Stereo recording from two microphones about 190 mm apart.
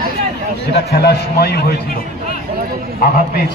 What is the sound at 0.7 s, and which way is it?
Speech, 60° left (ahead or behind).